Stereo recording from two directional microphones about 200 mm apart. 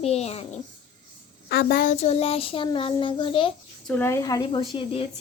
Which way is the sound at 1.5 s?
50° left (ahead or behind).